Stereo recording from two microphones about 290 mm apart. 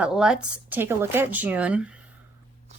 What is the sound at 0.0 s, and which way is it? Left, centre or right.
A woman's voice, centre.